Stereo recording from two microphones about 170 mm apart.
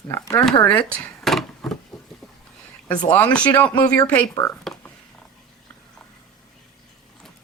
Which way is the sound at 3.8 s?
20° left (ahead or behind).